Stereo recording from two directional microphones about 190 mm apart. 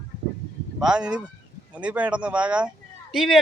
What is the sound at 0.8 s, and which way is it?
Speech, 5° right (ahead or behind).